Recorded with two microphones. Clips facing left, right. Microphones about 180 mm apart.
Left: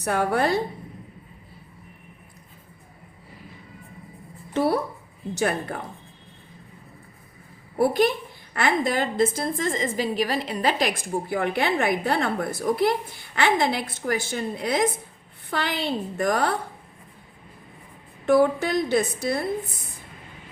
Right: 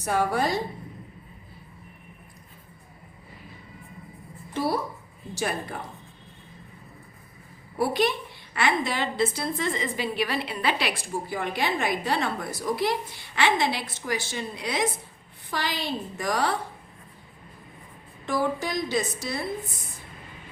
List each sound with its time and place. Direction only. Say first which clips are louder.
0.0 s a woman's voice: left 2 dB; 60° left (ahead or behind)
4.5 s a woman's voice: left 4 dB; 60° left (ahead or behind)
7.8 s a woman's voice: left 4 dB; 50° left (ahead or behind)
18.3 s a woman's voice: left 8 dB; 60° left (ahead or behind)